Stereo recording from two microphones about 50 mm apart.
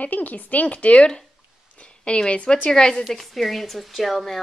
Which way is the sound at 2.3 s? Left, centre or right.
Left.